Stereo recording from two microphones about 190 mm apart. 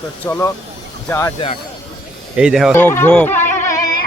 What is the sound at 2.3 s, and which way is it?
Speech, 5° right (ahead or behind).